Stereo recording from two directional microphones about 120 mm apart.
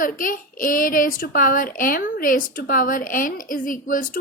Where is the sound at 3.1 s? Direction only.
90° left.